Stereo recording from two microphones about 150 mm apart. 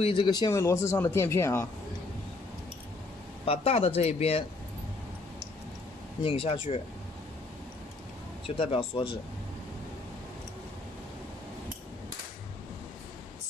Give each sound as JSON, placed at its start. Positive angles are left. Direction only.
{"t": 0.0, "sound": "speech", "side_deg": 35}
{"t": 3.4, "sound": "speech", "side_deg": 40}
{"t": 6.2, "sound": "speech", "side_deg": 40}
{"t": 8.5, "sound": "speech", "side_deg": 40}